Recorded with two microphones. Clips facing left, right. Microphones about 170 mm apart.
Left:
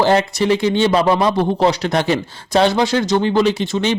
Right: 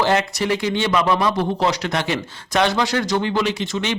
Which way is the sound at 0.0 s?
35° left (ahead or behind).